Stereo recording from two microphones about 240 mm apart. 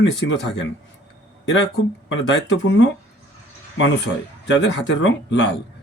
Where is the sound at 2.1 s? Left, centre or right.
Left.